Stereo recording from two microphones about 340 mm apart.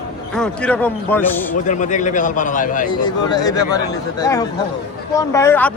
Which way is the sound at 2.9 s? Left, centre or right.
Centre.